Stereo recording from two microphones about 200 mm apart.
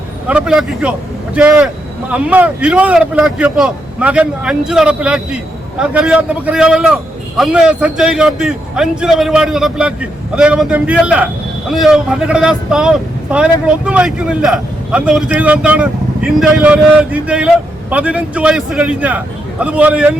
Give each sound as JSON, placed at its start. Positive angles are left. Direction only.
{"t": 0.3, "sound": "speech", "side_deg": -5}